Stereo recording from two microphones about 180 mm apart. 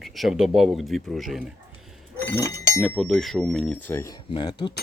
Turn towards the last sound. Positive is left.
turn(degrees=25)  # may be behind; listen again after turning